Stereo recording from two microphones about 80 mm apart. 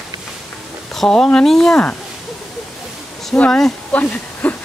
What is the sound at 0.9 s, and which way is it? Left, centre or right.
Speech, centre.